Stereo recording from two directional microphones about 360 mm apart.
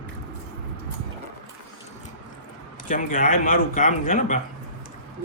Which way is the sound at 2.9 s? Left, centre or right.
Left.